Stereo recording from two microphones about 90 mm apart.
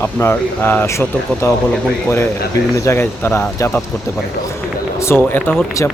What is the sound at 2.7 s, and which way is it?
Speech, 30° left (ahead or behind).